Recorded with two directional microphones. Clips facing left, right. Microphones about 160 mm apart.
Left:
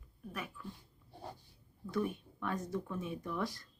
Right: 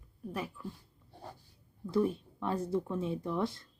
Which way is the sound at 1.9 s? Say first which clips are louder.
Right 6 dB; 30° right (ahead or behind).